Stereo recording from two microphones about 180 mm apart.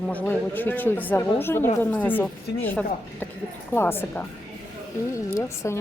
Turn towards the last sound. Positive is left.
turn(degrees=15)  # may be behind; listen again after turning